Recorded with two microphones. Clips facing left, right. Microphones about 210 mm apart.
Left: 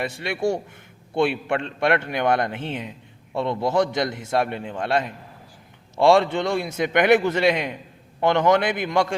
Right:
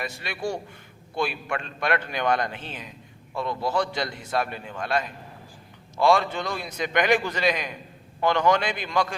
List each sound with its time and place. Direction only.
0.0 s a man's voice: 25° left (ahead or behind)